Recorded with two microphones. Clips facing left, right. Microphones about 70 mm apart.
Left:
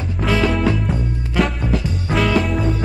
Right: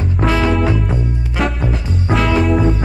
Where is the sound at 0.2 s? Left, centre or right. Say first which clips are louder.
Right 2 dB; centre.